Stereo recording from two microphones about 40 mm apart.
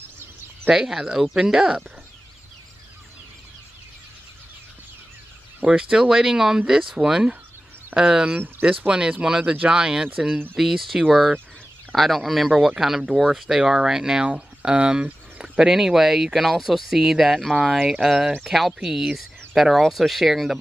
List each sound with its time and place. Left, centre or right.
0.7 s speech: centre
5.7 s speech: right
10.5 s speech: centre
14.2 s speech: right
15.6 s speech: centre